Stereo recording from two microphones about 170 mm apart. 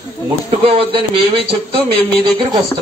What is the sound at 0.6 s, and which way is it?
Speech, 30° right (ahead or behind).